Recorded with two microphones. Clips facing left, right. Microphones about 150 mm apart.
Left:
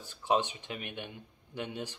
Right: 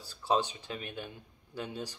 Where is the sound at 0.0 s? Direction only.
35° right (ahead or behind).